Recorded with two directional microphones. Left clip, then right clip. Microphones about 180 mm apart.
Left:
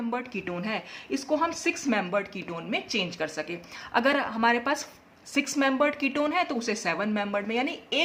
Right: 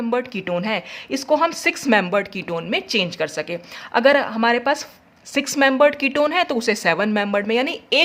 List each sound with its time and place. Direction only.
0.1 s speech: 45° right (ahead or behind)